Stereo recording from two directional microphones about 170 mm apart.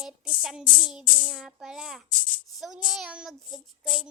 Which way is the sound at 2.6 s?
5° right (ahead or behind).